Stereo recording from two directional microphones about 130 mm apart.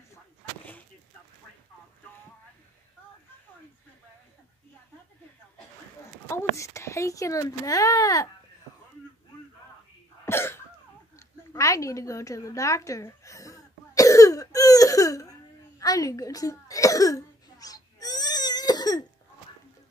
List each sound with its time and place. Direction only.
6.2 s a child's voice: 20° left (ahead or behind)
10.2 s cough: 20° left (ahead or behind)
11.1 s a sound: 25° left (ahead or behind)
15.8 s cough: 30° left (ahead or behind)